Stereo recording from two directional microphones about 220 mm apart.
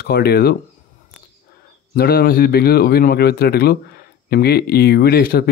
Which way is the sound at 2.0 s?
45° left (ahead or behind).